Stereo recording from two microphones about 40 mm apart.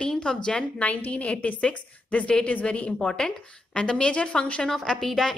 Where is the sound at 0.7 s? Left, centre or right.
Left.